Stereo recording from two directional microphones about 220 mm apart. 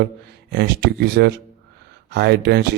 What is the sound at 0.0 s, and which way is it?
Speech, 50° right (ahead or behind).